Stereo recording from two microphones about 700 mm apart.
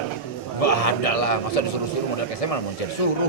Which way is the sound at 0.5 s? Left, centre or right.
Left.